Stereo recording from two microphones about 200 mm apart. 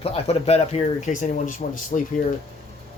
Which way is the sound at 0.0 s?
30° left (ahead or behind).